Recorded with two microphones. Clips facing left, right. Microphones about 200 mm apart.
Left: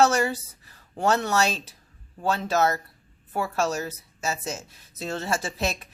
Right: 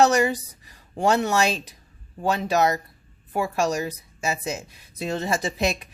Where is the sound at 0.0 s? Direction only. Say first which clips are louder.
Right 2 dB; 15° right (ahead or behind).